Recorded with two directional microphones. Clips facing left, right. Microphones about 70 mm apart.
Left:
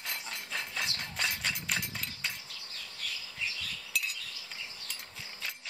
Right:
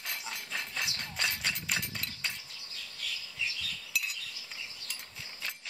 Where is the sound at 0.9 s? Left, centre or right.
Centre.